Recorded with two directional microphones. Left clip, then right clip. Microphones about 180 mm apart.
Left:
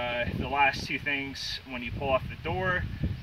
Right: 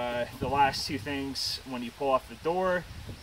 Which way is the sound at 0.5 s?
10° left (ahead or behind).